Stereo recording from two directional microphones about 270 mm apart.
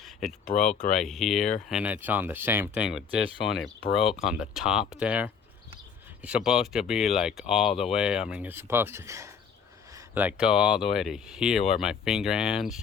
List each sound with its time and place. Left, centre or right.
0.0 s speech: centre
0.8 s speech: left
1.0 s speech: centre